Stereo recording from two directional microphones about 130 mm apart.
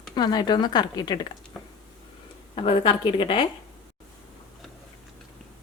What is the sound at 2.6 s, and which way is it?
Speech, 40° left (ahead or behind).